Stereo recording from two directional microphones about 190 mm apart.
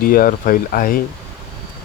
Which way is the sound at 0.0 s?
50° left (ahead or behind).